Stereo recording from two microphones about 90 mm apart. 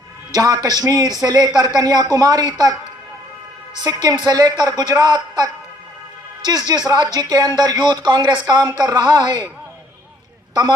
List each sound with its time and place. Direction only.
0.3 s speech: 45° right (ahead or behind)
3.8 s speech: 45° right (ahead or behind)